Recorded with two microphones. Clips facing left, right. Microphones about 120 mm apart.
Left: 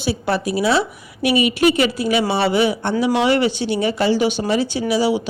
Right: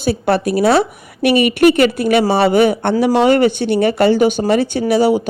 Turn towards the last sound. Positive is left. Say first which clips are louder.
# right 5 dB
turn(degrees=-50)  # may be behind; listen again after turning